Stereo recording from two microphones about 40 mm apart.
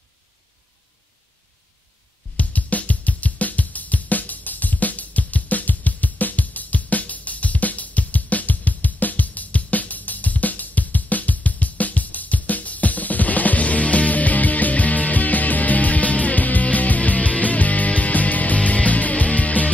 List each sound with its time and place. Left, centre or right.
2.3 s music: left